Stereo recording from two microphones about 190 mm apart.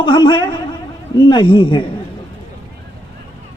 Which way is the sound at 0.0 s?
25° left (ahead or behind).